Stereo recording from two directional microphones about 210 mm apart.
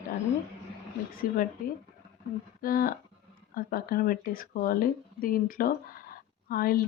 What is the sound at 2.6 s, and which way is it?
Speech, 45° left (ahead or behind).